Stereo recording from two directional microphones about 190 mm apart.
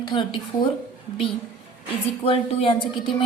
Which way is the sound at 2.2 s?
30° left (ahead or behind).